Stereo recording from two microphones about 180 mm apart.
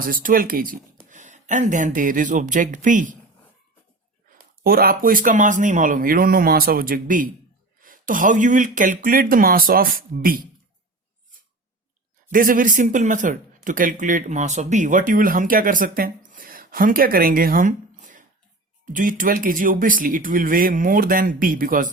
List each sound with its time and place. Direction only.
0.0 s speech: 50° right (ahead or behind)
4.3 s speech: 55° right (ahead or behind)
12.3 s speech: 50° right (ahead or behind)